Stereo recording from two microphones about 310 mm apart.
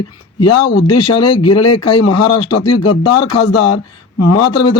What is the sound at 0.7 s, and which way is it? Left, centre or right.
Speech, left.